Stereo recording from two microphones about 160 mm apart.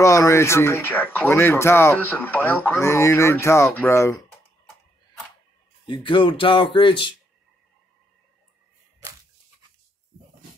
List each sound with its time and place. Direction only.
0.0 s speech: 20° left (ahead or behind)
5.9 s speech: 30° left (ahead or behind)